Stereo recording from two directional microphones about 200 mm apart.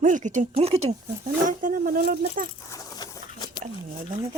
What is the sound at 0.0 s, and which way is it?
Speech, 40° right (ahead or behind).